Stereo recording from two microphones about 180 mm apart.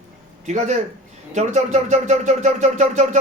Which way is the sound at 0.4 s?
40° right (ahead or behind).